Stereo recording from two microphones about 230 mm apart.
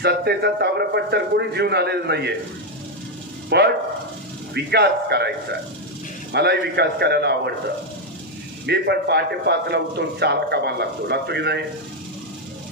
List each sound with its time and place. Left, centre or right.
0.0 s a man's voice: right
3.4 s a man's voice: right
8.6 s a man's voice: right